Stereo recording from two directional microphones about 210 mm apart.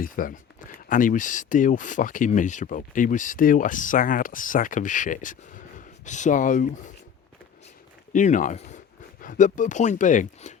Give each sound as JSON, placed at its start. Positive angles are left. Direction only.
{"t": 0.0, "sound": "speech", "side_deg": 40}
{"t": 8.1, "sound": "speech", "side_deg": 35}